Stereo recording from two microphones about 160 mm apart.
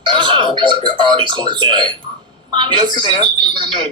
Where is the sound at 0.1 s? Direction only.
30° right (ahead or behind).